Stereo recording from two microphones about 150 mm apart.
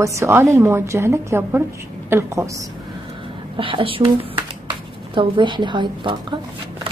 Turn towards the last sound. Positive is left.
turn(degrees=-30)  # may be behind; listen again after turning